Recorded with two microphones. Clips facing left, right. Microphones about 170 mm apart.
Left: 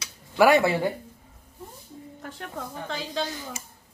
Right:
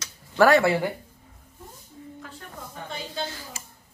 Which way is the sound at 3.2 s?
20° left (ahead or behind).